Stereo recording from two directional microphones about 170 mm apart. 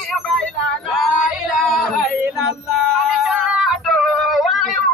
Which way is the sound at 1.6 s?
Centre (ahead or behind).